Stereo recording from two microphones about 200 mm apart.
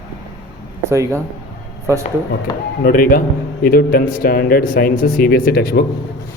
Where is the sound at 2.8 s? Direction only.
45° left (ahead or behind).